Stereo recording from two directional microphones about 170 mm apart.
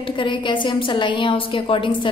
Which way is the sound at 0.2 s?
30° left (ahead or behind).